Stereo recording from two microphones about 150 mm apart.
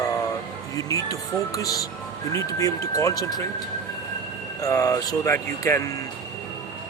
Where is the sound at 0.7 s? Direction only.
25° left (ahead or behind).